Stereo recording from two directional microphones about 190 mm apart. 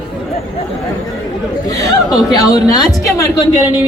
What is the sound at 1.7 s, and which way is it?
A man's voice, 20° left (ahead or behind).